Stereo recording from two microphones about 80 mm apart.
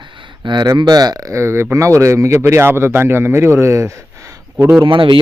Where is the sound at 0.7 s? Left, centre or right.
Right.